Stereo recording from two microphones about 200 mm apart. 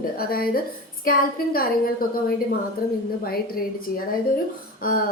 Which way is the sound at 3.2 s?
50° left (ahead or behind).